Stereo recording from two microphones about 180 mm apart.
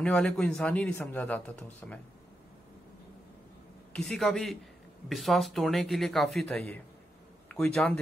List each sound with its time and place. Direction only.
0.0 s speech: 5° left (ahead or behind)
3.9 s a man's voice: 5° left (ahead or behind)